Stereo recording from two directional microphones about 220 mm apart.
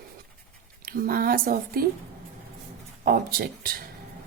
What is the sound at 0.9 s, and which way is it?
Speech, 40° right (ahead or behind).